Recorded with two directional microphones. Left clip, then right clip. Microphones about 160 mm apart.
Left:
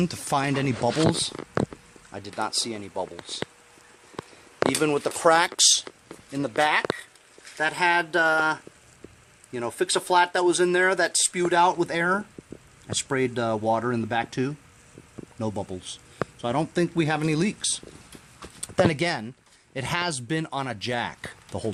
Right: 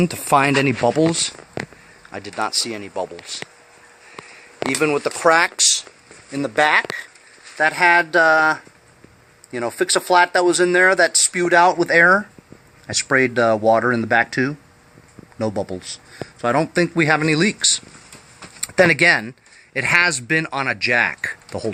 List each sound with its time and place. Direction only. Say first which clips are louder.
0.0 s speech: right 9 dB; centre (ahead or behind)
4.7 s speech: right 9 dB; 15° left (ahead or behind)
6.3 s speech: right 6 dB; 5° left (ahead or behind)
18.3 s a sound: right 8 dB; 15° left (ahead or behind)
19.7 s speech: right 12 dB; 20° left (ahead or behind)